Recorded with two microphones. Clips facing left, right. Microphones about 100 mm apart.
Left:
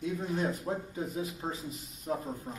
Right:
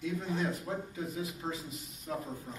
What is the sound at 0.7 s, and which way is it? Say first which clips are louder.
Speech: left 3 dB; 25° left (ahead or behind).